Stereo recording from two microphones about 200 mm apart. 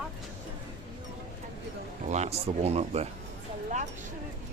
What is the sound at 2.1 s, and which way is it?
Speech, 35° right (ahead or behind).